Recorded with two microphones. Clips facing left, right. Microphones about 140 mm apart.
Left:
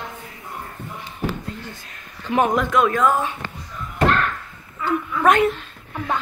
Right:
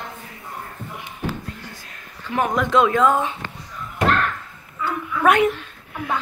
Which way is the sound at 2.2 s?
20° left (ahead or behind).